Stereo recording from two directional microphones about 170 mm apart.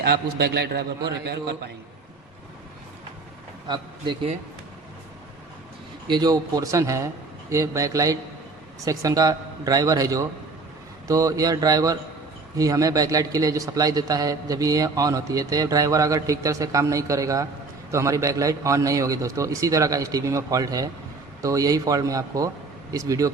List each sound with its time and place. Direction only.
0.0 s a man's voice: 70° right (ahead or behind)
3.7 s speech: 25° right (ahead or behind)
6.1 s speech: 25° right (ahead or behind)